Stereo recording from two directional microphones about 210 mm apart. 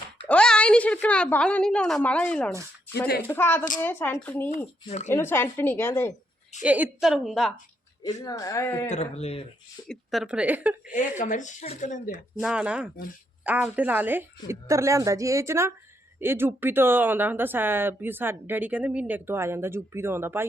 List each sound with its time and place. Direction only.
0.3 s a woman's voice: 5° left (ahead or behind)
6.6 s a woman's voice: 5° right (ahead or behind)
8.0 s a woman's voice: 15° left (ahead or behind)
8.9 s speech: 30° left (ahead or behind)
9.9 s a woman's voice: centre (ahead or behind)
11.2 s speech: 35° left (ahead or behind)
12.4 s a woman's voice: 5° right (ahead or behind)